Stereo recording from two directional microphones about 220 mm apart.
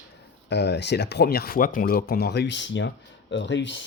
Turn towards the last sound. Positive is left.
turn(degrees=55)  # may be behind; listen again after turning